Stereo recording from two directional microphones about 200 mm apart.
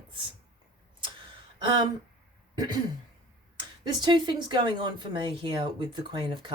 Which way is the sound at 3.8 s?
20° right (ahead or behind).